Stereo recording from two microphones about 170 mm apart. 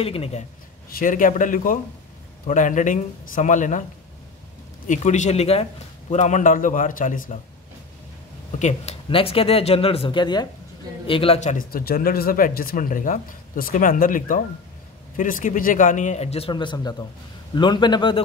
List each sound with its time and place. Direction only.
0.0 s speech: 35° left (ahead or behind)
0.8 s a man's voice: 55° left (ahead or behind)
4.8 s a man's voice: 45° left (ahead or behind)
8.5 s speech: 40° left (ahead or behind)
11.7 s a man's voice: 60° left (ahead or behind); by 18.2 s 25° left (ahead or behind)